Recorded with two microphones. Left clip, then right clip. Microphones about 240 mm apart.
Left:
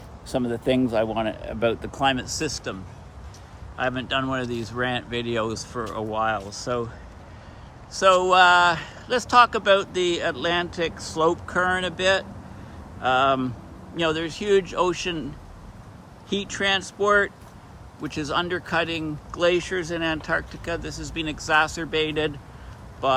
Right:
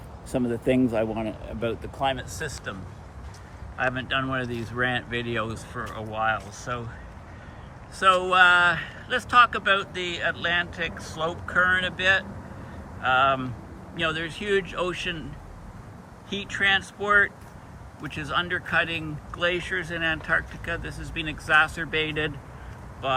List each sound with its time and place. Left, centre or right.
0.3 s speech: centre
1.5 s speech: left
3.8 s speech: centre
7.9 s speech: centre
16.3 s speech: centre